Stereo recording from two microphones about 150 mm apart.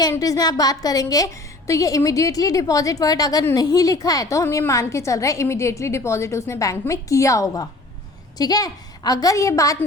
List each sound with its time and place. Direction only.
0.0 s a woman's voice: 25° left (ahead or behind)